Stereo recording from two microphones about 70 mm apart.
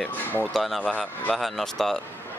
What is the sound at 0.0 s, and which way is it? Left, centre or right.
Speech, left.